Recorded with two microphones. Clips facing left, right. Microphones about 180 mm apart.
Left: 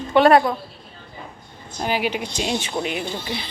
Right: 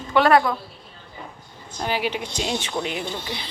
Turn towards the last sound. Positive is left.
turn(degrees=15)  # may be behind; listen again after turning